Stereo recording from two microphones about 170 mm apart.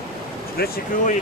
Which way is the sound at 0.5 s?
65° left (ahead or behind).